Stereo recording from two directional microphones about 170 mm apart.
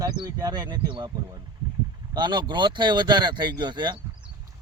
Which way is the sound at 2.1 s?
25° right (ahead or behind).